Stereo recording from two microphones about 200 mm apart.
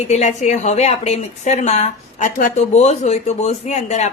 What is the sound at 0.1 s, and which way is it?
A woman's voice, 35° left (ahead or behind).